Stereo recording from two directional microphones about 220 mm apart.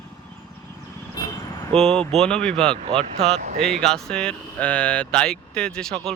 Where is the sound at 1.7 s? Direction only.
Centre (ahead or behind).